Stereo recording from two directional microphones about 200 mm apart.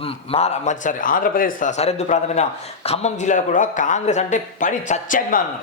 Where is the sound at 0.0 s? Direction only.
30° left (ahead or behind).